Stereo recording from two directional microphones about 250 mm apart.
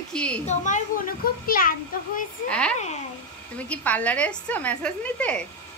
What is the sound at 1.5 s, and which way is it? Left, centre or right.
Speech, left.